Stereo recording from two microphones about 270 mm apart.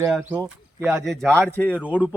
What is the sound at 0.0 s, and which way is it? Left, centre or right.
Speech, centre.